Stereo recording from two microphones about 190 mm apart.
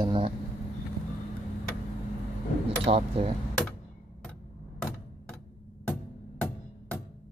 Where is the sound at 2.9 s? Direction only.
30° right (ahead or behind).